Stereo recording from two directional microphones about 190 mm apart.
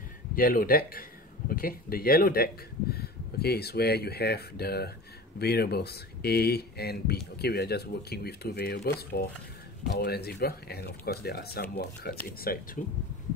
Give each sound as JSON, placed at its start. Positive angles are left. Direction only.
{"t": 0.4, "sound": "speech", "side_deg": 50}